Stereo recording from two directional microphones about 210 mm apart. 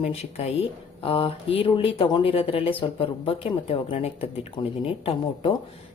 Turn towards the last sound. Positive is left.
turn(degrees=25)  # may be behind; listen again after turning